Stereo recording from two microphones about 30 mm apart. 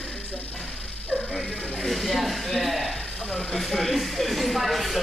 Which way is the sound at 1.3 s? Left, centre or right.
Centre.